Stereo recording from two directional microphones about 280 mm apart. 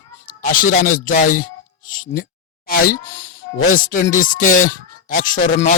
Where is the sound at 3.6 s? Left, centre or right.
Left.